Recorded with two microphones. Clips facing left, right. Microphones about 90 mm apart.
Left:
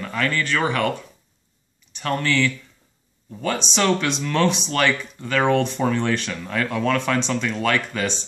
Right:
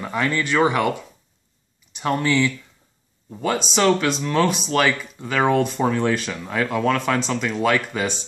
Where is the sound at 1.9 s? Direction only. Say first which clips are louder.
Right 2 dB; 15° right (ahead or behind).